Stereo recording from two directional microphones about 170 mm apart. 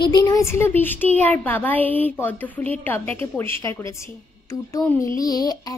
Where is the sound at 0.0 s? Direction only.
25° left (ahead or behind).